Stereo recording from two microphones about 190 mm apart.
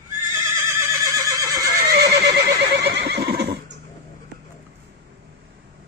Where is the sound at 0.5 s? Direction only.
15° right (ahead or behind).